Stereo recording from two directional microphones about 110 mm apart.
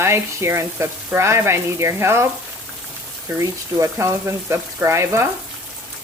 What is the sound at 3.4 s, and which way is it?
Speech, 30° right (ahead or behind).